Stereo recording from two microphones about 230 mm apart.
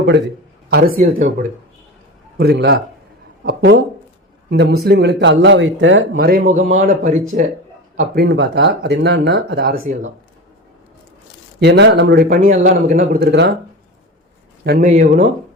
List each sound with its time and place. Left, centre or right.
0.7 s speech: right
2.4 s speech: right
7.9 s speech: right
11.6 s speech: right
14.6 s speech: right